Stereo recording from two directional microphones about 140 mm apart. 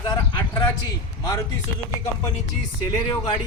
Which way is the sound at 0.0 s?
30° left (ahead or behind).